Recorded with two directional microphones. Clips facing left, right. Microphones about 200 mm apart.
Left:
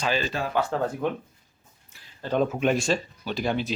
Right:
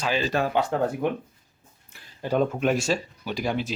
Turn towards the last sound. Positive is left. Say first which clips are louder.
# even
turn(degrees=-10)  # may be behind; listen again after turning